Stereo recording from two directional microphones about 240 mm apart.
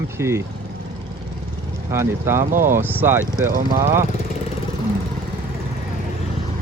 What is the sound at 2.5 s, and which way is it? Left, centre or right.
Speech, right.